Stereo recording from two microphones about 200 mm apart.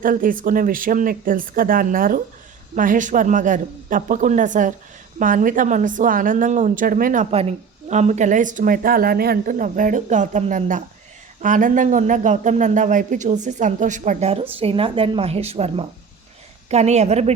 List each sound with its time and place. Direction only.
0.0 s a woman's voice: 45° right (ahead or behind)